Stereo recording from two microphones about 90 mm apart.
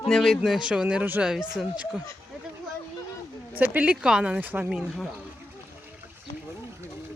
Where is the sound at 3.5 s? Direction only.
20° right (ahead or behind).